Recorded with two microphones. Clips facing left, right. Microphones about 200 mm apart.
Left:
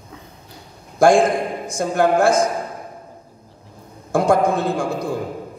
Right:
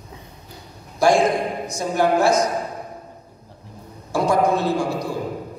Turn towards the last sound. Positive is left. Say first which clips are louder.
# even
turn(degrees=50)  # may be behind; listen again after turning